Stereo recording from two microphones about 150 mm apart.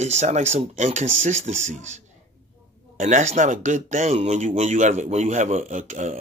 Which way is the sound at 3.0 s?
55° right (ahead or behind).